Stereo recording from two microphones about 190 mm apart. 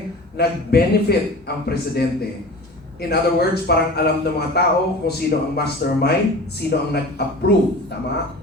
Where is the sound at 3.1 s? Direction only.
55° left (ahead or behind).